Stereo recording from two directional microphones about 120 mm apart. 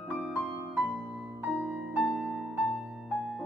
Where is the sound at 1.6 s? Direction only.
5° right (ahead or behind).